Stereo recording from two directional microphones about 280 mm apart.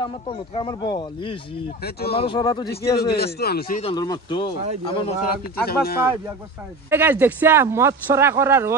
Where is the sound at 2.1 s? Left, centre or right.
Centre.